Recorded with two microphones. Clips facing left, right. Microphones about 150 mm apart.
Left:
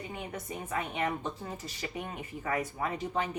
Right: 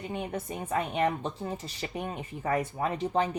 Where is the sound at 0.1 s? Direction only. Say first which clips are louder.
Right 5 dB; 30° right (ahead or behind).